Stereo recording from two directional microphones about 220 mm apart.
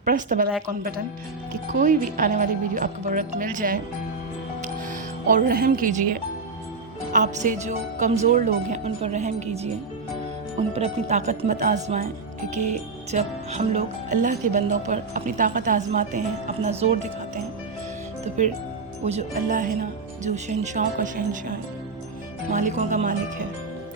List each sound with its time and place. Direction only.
0.0 s speech: 40° right (ahead or behind)
5.3 s speech: 40° right (ahead or behind)
10.8 s speech: 30° right (ahead or behind)
18.4 s speech: 30° right (ahead or behind)